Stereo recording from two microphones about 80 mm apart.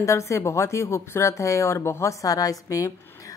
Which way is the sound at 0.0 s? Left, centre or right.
Left.